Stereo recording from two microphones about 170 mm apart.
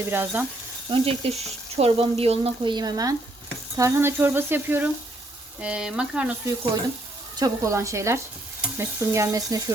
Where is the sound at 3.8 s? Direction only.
15° right (ahead or behind).